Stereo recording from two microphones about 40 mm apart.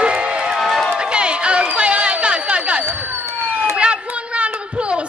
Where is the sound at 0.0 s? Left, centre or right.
Right.